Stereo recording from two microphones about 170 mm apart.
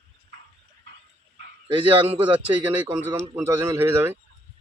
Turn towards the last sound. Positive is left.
turn(degrees=-15)  # may be behind; listen again after turning